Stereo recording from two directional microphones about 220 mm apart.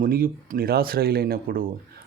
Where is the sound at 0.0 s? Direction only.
40° right (ahead or behind).